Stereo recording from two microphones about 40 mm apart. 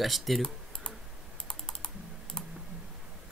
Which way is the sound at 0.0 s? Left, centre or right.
Centre.